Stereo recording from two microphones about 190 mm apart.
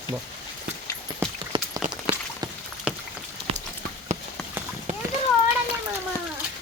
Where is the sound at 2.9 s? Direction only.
5° right (ahead or behind).